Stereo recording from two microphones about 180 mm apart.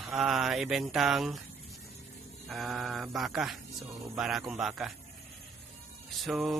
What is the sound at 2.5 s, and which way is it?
A man's voice, centre (ahead or behind).